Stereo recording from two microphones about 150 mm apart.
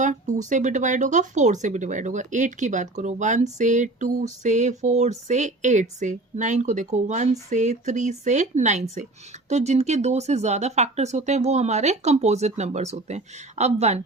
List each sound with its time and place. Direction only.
0.0 s speech: 55° right (ahead or behind)